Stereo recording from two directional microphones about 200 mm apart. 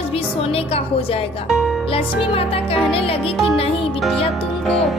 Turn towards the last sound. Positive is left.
turn(degrees=0)  # may be behind; listen again after turning